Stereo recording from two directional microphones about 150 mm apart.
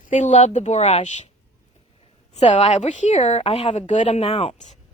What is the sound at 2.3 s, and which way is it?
A woman's voice, 45° left (ahead or behind).